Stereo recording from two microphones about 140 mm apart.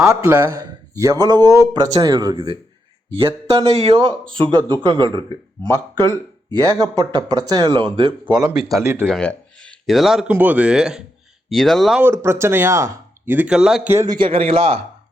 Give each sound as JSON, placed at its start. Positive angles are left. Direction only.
{"t": 0.1, "sound": "speech", "side_deg": -20}
{"t": 8.2, "sound": "speech", "side_deg": -5}
{"t": 9.0, "sound": "speech", "side_deg": 5}
{"t": 12.0, "sound": "speech", "side_deg": -20}
{"t": 13.9, "sound": "speech", "side_deg": -20}
{"t": 14.2, "sound": "speech", "side_deg": -40}